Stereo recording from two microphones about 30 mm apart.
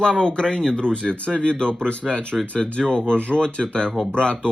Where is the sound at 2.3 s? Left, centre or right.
Right.